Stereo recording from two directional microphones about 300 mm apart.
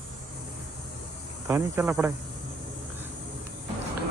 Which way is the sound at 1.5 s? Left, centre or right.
Centre.